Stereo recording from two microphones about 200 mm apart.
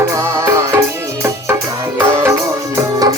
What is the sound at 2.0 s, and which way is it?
Music, 10° right (ahead or behind).